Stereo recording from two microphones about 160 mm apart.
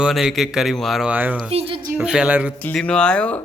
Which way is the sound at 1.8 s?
15° right (ahead or behind).